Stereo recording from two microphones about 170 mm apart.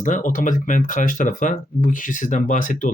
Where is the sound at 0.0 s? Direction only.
50° left (ahead or behind).